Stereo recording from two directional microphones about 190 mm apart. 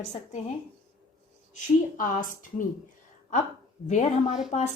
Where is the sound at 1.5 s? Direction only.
40° left (ahead or behind).